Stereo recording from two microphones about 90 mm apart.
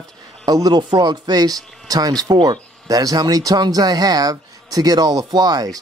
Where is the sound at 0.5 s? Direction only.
45° right (ahead or behind).